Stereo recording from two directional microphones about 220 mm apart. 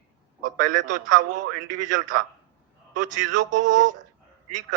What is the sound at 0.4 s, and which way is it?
A man's voice, 35° right (ahead or behind).